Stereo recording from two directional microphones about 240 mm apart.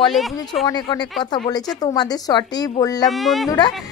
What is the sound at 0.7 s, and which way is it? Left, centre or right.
Speech, centre.